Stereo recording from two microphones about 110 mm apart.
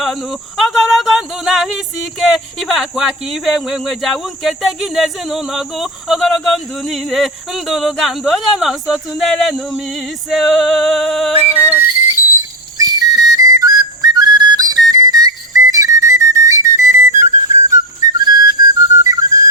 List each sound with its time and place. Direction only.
0.0 s speech: centre (ahead or behind)
11.5 s whistle: 15° right (ahead or behind)
12.8 s whistle: 35° right (ahead or behind)
17.7 s whistle: 35° right (ahead or behind)